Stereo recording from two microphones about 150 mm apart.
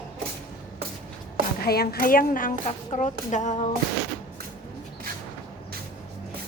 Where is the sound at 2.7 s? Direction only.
50° left (ahead or behind).